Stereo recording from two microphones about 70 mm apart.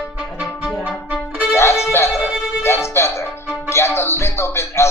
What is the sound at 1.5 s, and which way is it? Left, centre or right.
Music, left.